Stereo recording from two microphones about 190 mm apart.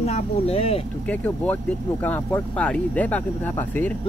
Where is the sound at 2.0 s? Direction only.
10° left (ahead or behind).